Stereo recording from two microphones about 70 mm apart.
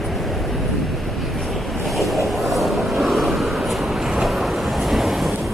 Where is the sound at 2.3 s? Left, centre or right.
Centre.